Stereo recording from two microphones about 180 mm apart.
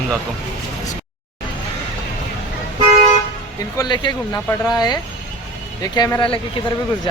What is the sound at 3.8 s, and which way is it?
Speech, 25° left (ahead or behind).